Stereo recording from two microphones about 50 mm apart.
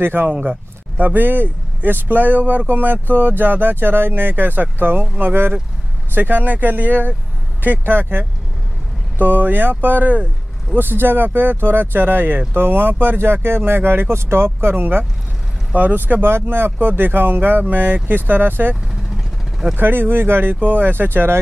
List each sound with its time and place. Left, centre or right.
0.0 s speech: right
0.3 s speech: right
10.7 s speech: right
20.5 s speech: right